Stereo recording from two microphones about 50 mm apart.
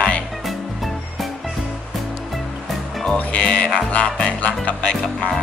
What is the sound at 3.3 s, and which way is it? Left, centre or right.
Music, left.